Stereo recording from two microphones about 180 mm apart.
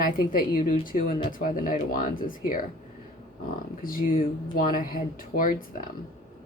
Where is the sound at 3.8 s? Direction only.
50° left (ahead or behind).